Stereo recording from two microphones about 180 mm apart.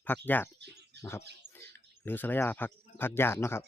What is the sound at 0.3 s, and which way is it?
Speech, 10° left (ahead or behind).